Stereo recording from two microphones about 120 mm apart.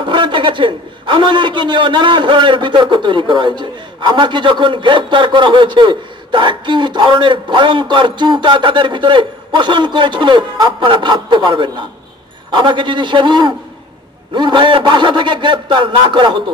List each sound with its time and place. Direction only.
0.0 s a man's voice: 40° right (ahead or behind)